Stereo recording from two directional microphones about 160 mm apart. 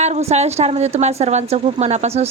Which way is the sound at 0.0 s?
45° right (ahead or behind).